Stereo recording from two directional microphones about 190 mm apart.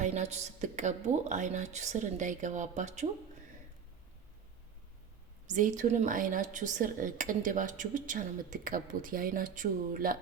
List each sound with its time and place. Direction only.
0.0 s a woman's voice: 35° right (ahead or behind)
5.5 s speech: 40° right (ahead or behind)